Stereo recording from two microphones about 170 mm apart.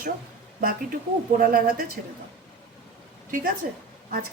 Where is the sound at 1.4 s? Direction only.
55° right (ahead or behind).